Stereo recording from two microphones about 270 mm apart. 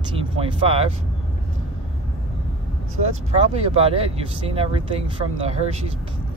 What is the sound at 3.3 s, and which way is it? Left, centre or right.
Speech, right.